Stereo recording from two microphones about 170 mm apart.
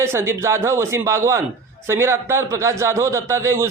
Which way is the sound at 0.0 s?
15° right (ahead or behind).